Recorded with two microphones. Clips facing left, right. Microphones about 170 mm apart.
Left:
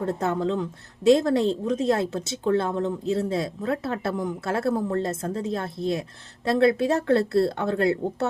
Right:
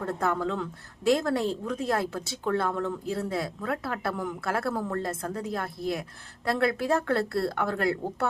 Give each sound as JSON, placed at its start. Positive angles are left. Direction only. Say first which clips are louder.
{"t": 0.0, "sound": "a woman's voice", "louder": "left 3 dB", "side_deg": 25}